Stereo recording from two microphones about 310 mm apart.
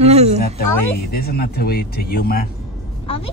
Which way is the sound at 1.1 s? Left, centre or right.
Left.